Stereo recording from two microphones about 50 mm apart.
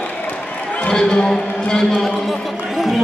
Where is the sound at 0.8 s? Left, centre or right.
Centre.